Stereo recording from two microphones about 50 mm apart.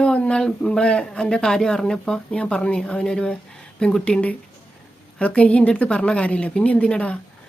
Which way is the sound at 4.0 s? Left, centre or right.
Left.